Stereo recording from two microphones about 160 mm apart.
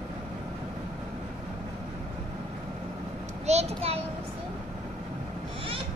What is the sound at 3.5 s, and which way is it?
Speech, 40° right (ahead or behind).